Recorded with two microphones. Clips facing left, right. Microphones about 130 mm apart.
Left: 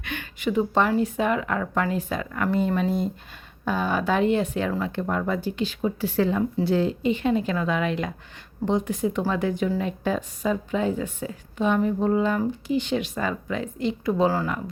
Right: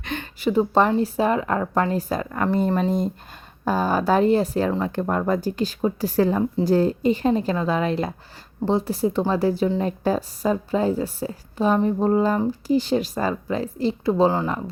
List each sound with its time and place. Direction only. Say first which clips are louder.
0.0 s a woman's voice: right 4 dB; 35° right (ahead or behind)